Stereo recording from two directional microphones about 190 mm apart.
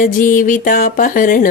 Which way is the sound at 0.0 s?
45° left (ahead or behind).